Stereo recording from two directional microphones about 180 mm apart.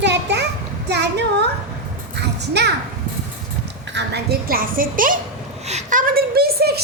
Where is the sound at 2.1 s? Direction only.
70° right (ahead or behind).